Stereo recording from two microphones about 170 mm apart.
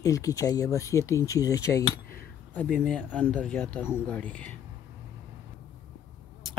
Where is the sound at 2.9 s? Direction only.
5° left (ahead or behind).